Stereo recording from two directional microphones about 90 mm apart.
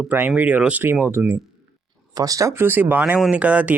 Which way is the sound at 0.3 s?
15° right (ahead or behind).